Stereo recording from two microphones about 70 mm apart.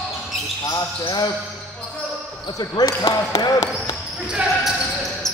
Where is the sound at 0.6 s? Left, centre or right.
Left.